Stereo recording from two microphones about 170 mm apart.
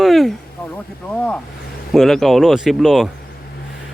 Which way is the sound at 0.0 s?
Centre (ahead or behind).